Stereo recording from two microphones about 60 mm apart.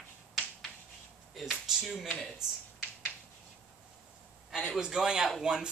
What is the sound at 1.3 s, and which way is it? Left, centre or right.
Speech, centre.